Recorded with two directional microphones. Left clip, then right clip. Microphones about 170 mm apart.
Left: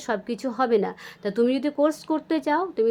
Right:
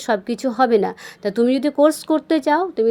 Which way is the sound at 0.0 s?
25° right (ahead or behind).